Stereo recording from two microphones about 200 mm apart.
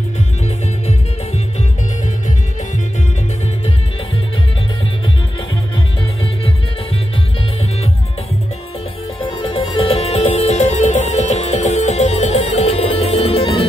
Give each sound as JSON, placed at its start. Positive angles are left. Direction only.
{"t": 9.2, "sound": "music", "side_deg": 25}